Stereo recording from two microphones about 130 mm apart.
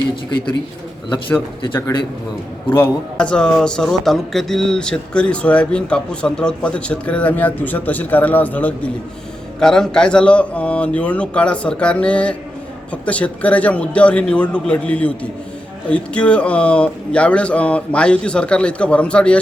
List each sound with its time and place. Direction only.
1.6 s speech: 35° left (ahead or behind)
3.2 s speech: 5° left (ahead or behind)